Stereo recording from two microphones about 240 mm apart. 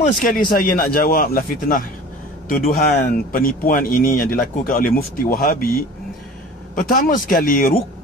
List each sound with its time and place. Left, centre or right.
0.2 s speech: left